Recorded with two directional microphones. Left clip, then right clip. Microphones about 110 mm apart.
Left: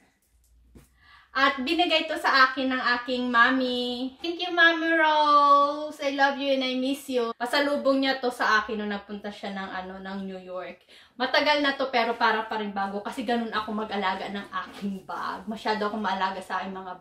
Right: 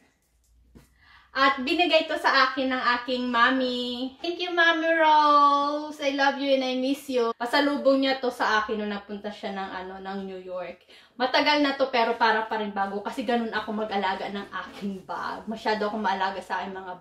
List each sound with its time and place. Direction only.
1.3 s a woman's voice: 15° left (ahead or behind)
11.1 s a woman's voice: 15° left (ahead or behind)